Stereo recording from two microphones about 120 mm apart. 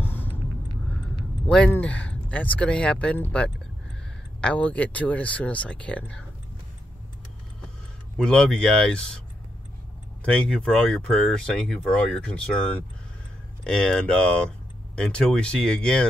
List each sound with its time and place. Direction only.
0.0 s a sound: 15° left (ahead or behind)
1.7 s speech: 10° left (ahead or behind)
8.2 s speech: 5° left (ahead or behind)
10.2 s speech: 10° left (ahead or behind)